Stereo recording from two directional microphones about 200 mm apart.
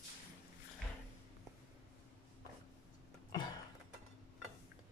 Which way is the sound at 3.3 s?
20° left (ahead or behind).